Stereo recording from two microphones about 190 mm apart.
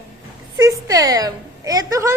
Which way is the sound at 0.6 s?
20° right (ahead or behind).